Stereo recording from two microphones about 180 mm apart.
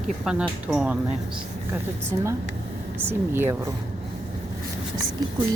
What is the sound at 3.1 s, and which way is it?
Speech, 10° right (ahead or behind).